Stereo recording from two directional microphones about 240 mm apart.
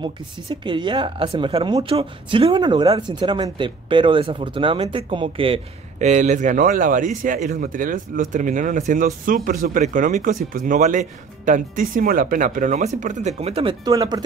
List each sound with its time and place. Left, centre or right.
0.0 s speech: centre